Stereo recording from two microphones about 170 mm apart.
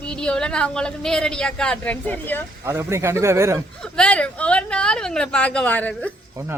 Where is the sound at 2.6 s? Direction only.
15° right (ahead or behind).